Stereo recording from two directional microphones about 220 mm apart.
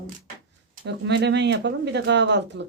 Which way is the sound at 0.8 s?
50° right (ahead or behind).